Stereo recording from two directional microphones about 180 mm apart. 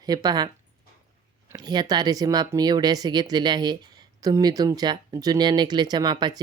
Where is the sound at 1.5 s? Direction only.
25° right (ahead or behind).